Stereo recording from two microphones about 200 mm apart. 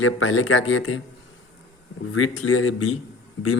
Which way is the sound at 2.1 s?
90° left.